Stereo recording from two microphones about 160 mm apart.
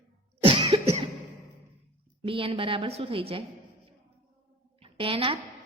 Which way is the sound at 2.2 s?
35° right (ahead or behind).